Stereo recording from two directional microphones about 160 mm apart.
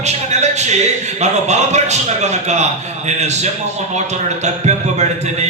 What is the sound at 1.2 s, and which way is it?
Speech, 45° right (ahead or behind).